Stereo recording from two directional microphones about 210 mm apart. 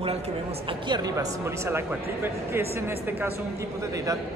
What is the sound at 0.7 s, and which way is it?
Speech, 20° right (ahead or behind).